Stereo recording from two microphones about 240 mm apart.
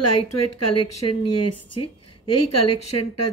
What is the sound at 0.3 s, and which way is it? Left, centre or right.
Speech, left.